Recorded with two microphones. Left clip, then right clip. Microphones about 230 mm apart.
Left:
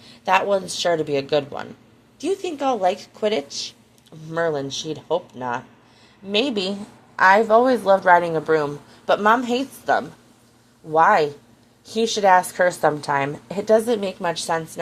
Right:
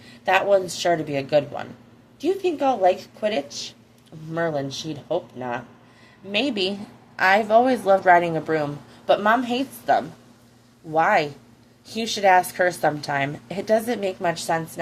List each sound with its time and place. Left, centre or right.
0.3 s a woman's voice: left